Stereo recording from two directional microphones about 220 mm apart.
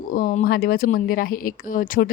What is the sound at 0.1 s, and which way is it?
Speech, 40° left (ahead or behind).